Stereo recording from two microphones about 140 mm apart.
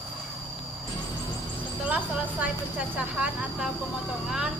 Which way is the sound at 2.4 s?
5° right (ahead or behind).